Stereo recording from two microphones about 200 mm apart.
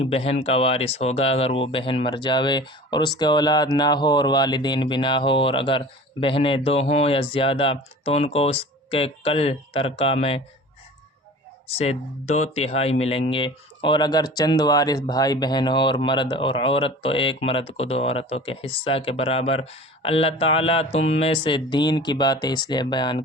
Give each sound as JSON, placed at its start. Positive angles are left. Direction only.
{"t": 0.0, "sound": "speech", "side_deg": 30}
{"t": 11.8, "sound": "speech", "side_deg": 35}